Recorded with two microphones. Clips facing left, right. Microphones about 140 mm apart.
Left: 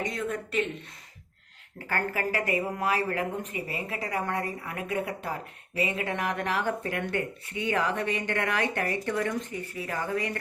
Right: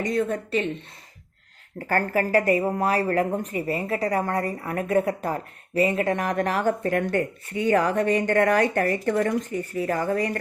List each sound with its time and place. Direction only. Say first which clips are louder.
0.0 s speech: right 7 dB; 40° right (ahead or behind)
1.9 s a woman's voice: right 8 dB; 40° right (ahead or behind)